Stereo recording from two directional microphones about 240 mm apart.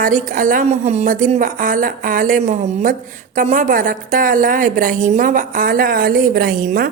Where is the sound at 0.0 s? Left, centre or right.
Right.